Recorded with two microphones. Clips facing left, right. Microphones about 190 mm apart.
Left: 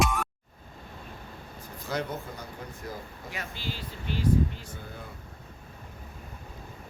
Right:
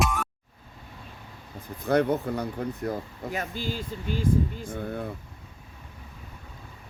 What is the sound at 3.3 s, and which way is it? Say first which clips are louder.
Speech: right 6 dB; 45° right (ahead or behind).